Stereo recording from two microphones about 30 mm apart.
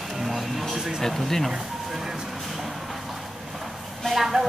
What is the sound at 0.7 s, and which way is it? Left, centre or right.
Speech, centre.